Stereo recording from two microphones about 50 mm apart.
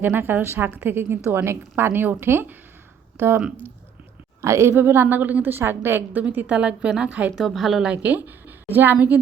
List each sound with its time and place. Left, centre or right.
0.0 s a woman's voice: right
4.4 s speech: right
4.7 s a woman's voice: right
6.5 s a woman's voice: right
7.3 s a woman's voice: centre
8.0 s speech: right